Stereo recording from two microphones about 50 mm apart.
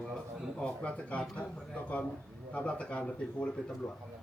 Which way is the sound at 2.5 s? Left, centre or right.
Left.